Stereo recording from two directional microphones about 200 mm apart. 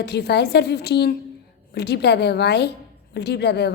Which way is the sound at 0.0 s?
55° left (ahead or behind).